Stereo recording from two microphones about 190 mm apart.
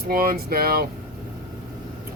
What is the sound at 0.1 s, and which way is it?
Speech, 50° right (ahead or behind).